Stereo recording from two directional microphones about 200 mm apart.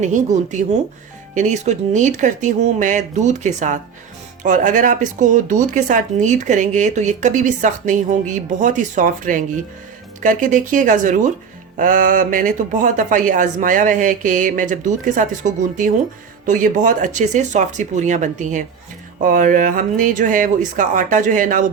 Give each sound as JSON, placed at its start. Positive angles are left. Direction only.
{"t": 0.0, "sound": "speech", "side_deg": -35}